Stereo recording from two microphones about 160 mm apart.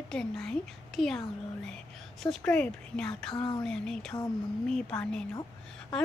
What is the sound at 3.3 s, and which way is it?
Speech, 30° left (ahead or behind).